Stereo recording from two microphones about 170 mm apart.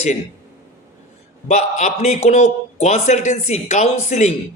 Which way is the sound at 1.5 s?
40° left (ahead or behind).